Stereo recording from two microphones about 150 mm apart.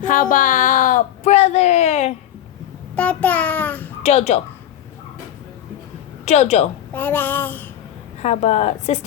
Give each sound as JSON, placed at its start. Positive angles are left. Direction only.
{"t": 0.0, "sound": "a sound", "side_deg": 65}
{"t": 2.9, "sound": "child singing", "side_deg": 10}
{"t": 4.0, "sound": "a woman's voice", "side_deg": 45}
{"t": 6.2, "sound": "a woman's voice", "side_deg": 50}
{"t": 6.9, "sound": "child singing", "side_deg": 15}
{"t": 8.2, "sound": "a woman's voice", "side_deg": 45}